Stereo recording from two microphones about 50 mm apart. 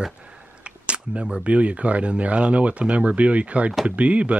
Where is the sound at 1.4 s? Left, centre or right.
Right.